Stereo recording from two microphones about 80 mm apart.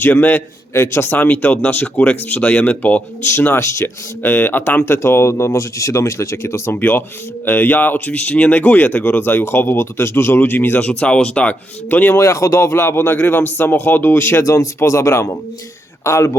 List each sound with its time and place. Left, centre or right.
0.0 s speech: left
10.8 s speech: centre
12.2 s speech: left